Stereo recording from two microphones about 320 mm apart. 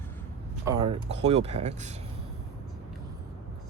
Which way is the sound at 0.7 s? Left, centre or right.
Centre.